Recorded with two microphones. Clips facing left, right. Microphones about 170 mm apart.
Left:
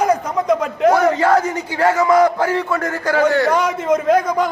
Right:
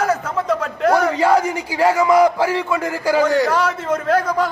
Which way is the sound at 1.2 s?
10° right (ahead or behind).